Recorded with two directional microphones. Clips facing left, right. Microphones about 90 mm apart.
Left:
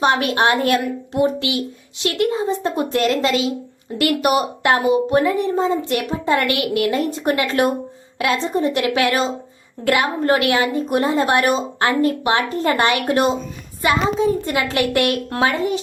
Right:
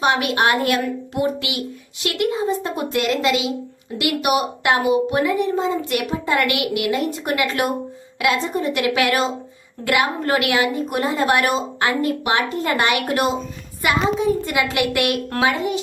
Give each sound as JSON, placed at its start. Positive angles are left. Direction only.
{"t": 0.0, "sound": "a woman's voice", "side_deg": 30}